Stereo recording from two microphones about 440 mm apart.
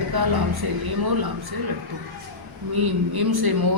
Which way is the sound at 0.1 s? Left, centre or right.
Right.